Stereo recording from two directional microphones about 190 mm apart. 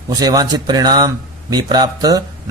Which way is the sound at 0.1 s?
20° right (ahead or behind).